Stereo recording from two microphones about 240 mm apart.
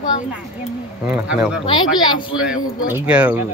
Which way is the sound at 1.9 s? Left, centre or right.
Centre.